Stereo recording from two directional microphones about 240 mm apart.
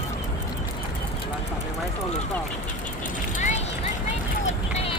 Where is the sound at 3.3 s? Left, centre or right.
Left.